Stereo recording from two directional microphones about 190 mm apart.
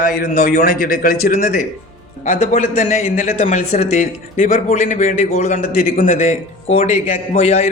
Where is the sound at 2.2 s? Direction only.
40° left (ahead or behind).